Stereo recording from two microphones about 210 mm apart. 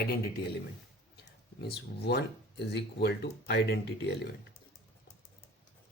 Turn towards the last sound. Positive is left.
turn(degrees=50)  # may be behind; listen again after turning